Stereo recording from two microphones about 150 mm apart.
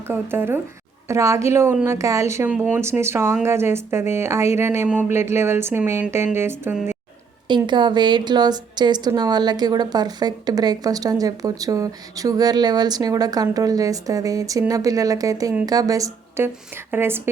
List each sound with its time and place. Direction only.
0.1 s a woman's voice: 15° right (ahead or behind)
2.5 s speech: 10° right (ahead or behind)
7.4 s a woman's voice: 30° right (ahead or behind); by 17.2 s 15° right (ahead or behind)